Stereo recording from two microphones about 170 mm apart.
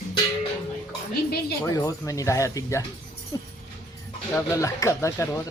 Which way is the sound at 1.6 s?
20° left (ahead or behind).